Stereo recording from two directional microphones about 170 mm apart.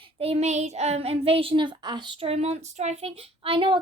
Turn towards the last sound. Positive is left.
turn(degrees=-30)  # may be behind; listen again after turning